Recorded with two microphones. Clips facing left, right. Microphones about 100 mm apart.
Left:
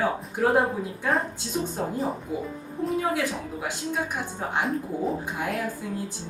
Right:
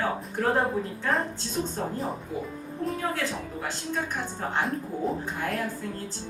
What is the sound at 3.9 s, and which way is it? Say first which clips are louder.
Speech: left 1 dB; 10° left (ahead or behind).